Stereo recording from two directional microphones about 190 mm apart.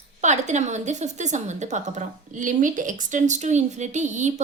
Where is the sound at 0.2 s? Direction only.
40° right (ahead or behind).